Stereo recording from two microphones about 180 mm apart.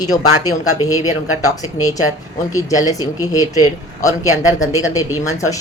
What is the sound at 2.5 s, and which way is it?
Speech, 20° left (ahead or behind).